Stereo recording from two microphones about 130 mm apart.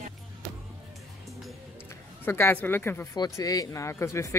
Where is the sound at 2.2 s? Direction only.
15° left (ahead or behind).